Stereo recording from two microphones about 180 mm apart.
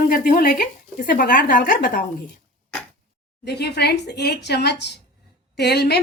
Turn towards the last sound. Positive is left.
turn(degrees=65)  # may be behind; listen again after turning